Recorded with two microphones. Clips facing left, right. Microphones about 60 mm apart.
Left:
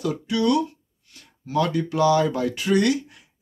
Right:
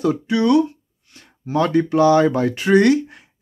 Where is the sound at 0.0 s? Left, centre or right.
Right.